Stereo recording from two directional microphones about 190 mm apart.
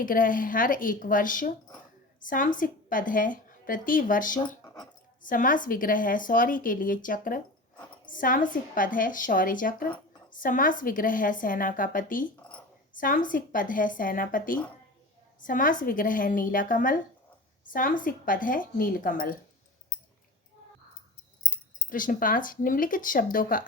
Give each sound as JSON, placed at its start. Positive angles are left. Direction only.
{"t": 0.0, "sound": "a woman's voice", "side_deg": 45}
{"t": 4.6, "sound": "a sound", "side_deg": 20}
{"t": 5.2, "sound": "a woman's voice", "side_deg": 45}
{"t": 21.8, "sound": "a woman's voice", "side_deg": 45}